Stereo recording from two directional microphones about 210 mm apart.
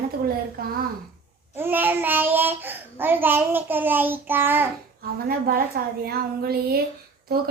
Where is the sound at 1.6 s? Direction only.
10° right (ahead or behind).